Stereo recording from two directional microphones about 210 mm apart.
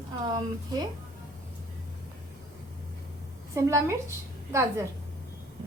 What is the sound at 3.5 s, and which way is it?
A woman's voice, 15° right (ahead or behind).